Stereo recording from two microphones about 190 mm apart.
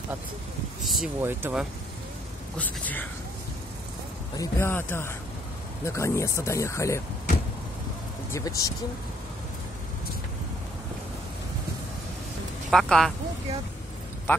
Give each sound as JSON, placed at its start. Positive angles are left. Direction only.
{"t": 0.8, "sound": "speech", "side_deg": 0}
{"t": 2.5, "sound": "speech", "side_deg": 10}
{"t": 4.4, "sound": "speech", "side_deg": 10}
{"t": 8.3, "sound": "speech", "side_deg": 15}
{"t": 12.7, "sound": "speech", "side_deg": 0}